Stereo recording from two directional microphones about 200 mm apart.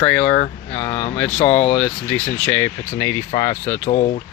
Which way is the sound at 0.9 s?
35° left (ahead or behind).